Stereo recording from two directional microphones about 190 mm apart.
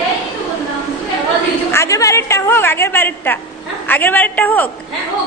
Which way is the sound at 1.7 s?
15° left (ahead or behind).